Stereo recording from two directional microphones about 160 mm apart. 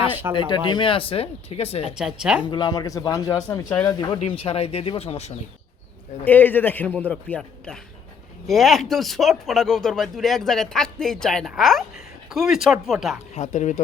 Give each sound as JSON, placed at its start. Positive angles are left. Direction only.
{"t": 0.3, "sound": "speech", "side_deg": 30}
{"t": 2.0, "sound": "speech", "side_deg": -5}
{"t": 2.5, "sound": "speech", "side_deg": 25}
{"t": 3.7, "sound": "a man's voice", "side_deg": 10}
{"t": 3.9, "sound": "speech", "side_deg": 25}
{"t": 4.3, "sound": "speech", "side_deg": 40}
{"t": 6.2, "sound": "a man's voice", "side_deg": 10}
{"t": 13.3, "sound": "speech", "side_deg": 45}